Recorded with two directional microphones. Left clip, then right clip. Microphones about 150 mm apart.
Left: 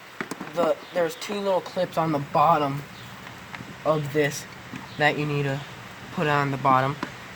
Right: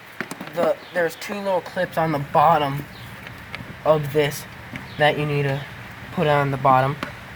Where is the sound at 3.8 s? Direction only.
10° left (ahead or behind).